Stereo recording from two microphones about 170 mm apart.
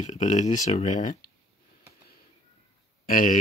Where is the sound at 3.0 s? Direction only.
55° left (ahead or behind).